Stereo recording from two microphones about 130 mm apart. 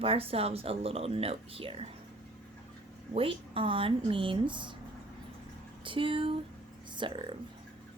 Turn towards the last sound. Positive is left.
turn(degrees=-40)  # may be behind; listen again after turning